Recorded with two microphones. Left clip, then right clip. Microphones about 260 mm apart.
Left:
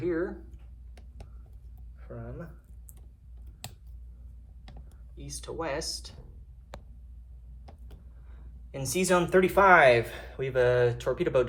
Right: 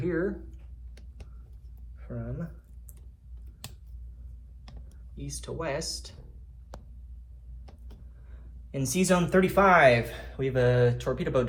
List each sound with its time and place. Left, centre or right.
0.0 s a sound: left
2.0 s speech: centre
5.1 s speech: left
8.3 s speech: left